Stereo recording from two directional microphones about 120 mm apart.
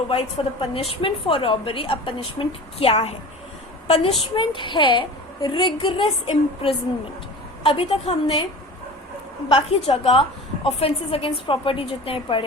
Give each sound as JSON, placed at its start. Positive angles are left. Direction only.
{"t": 0.6, "sound": "a woman's voice", "side_deg": 50}
{"t": 4.4, "sound": "a woman's voice", "side_deg": 40}
{"t": 9.5, "sound": "a woman's voice", "side_deg": 50}